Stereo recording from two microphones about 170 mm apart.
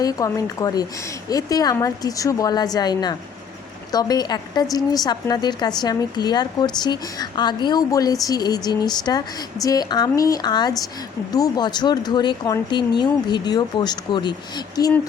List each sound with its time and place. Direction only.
0.0 s a woman's voice: 20° left (ahead or behind)